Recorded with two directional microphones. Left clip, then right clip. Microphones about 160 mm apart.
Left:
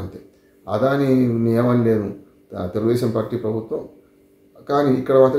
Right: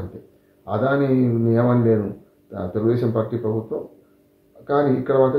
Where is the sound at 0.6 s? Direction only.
15° left (ahead or behind).